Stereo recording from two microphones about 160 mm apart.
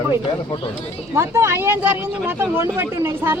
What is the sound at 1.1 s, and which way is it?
Speech, 15° right (ahead or behind).